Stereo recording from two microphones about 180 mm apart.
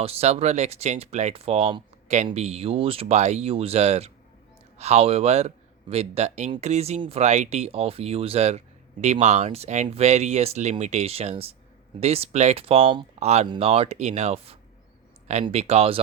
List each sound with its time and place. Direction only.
0.0 s speech: 35° right (ahead or behind)